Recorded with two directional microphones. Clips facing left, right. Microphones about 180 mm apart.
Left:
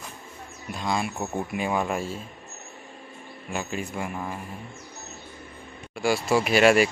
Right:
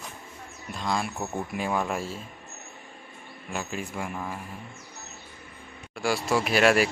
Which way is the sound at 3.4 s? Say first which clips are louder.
Left 2 dB; centre (ahead or behind).